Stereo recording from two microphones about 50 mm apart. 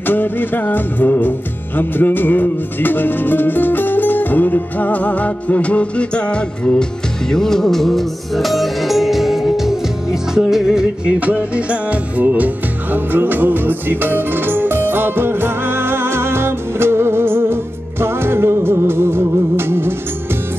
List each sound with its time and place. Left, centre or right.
0.0 s music: left
7.2 s music: centre
11.1 s music: right
12.9 s music: right